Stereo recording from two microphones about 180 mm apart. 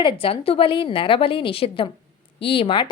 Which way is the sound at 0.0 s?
30° left (ahead or behind).